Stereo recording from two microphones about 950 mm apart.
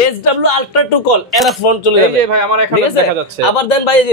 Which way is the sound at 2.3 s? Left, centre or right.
Right.